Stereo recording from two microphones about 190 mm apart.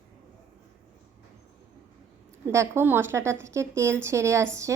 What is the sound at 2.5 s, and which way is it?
A woman's voice, 15° right (ahead or behind).